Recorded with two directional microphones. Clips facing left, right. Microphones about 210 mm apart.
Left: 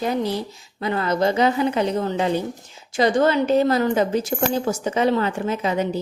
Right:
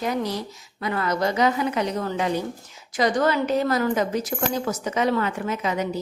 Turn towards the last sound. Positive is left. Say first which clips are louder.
# left 3 dB
turn(degrees=30)  # may be behind; listen again after turning